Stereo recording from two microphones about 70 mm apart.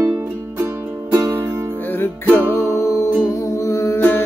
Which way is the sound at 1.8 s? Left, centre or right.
Left.